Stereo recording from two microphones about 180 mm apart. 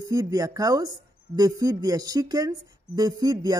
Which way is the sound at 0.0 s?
20° right (ahead or behind).